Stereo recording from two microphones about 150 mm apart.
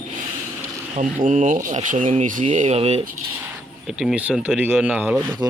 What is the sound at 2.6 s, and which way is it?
Speech, 45° right (ahead or behind).